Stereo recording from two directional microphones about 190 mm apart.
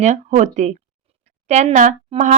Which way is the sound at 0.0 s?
40° right (ahead or behind).